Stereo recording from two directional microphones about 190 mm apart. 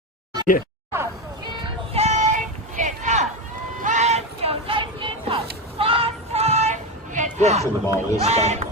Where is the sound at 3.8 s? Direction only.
40° right (ahead or behind).